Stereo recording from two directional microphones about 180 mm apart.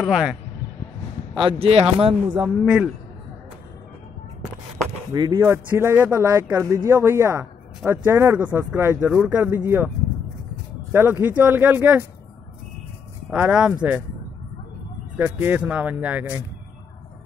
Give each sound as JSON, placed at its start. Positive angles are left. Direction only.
{"t": 0.0, "sound": "speech", "side_deg": -5}
{"t": 1.3, "sound": "speech", "side_deg": -25}
{"t": 2.3, "sound": "speech", "side_deg": -10}
{"t": 5.1, "sound": "speech", "side_deg": -20}
{"t": 10.9, "sound": "speech", "side_deg": -10}
{"t": 13.3, "sound": "speech", "side_deg": -5}
{"t": 15.1, "sound": "speech", "side_deg": -10}